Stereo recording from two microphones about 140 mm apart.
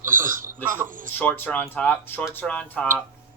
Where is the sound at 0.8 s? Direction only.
70° right (ahead or behind).